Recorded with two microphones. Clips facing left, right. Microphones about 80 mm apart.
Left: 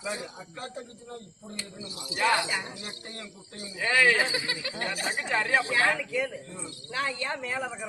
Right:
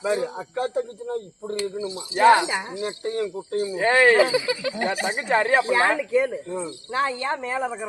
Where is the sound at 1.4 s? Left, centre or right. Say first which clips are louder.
Right 16 dB; right.